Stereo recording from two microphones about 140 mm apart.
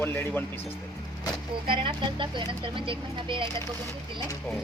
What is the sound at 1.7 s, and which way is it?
Speech, 35° right (ahead or behind).